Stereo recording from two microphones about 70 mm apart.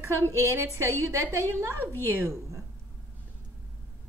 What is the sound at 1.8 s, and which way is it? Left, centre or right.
Speech, left.